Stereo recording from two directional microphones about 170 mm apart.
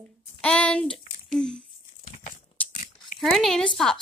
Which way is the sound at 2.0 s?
45° left (ahead or behind).